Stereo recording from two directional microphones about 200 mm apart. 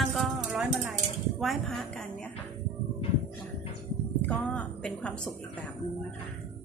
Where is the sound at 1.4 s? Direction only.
Centre (ahead or behind).